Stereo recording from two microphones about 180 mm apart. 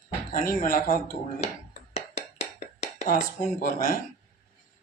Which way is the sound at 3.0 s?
50° left (ahead or behind).